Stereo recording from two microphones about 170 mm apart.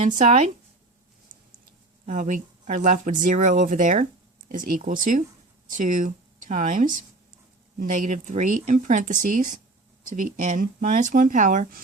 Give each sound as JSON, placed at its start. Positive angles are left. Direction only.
{"t": 2.0, "sound": "speech", "side_deg": -45}